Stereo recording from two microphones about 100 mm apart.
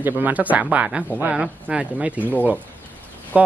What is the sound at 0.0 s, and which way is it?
Speech, 15° right (ahead or behind).